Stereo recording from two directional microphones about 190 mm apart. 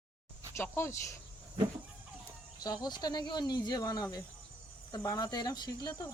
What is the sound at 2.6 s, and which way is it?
Speech, 20° left (ahead or behind).